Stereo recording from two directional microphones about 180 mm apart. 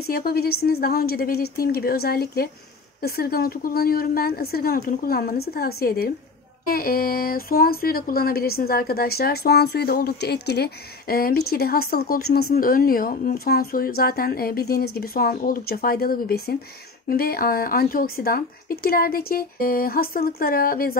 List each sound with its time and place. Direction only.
0.0 s speech: 55° left (ahead or behind)